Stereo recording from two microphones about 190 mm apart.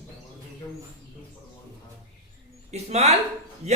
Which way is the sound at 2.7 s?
35° right (ahead or behind).